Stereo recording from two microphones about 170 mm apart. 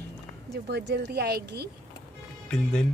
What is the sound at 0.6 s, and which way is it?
Speech, 80° right.